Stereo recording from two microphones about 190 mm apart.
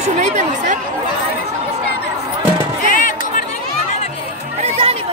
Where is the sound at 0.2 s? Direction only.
40° right (ahead or behind).